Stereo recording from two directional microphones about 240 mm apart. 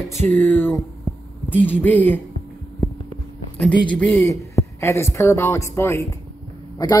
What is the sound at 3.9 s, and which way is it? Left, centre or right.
A man's voice, centre.